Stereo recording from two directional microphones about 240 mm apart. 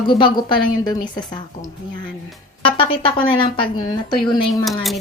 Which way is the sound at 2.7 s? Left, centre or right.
Left.